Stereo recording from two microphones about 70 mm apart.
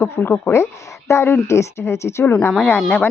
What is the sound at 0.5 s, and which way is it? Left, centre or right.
A woman's voice, left.